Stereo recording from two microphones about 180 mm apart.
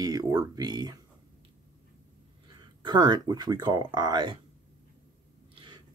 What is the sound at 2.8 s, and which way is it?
Speech, 25° right (ahead or behind).